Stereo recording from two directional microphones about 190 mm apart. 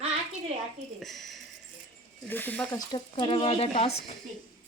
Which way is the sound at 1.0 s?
Centre (ahead or behind).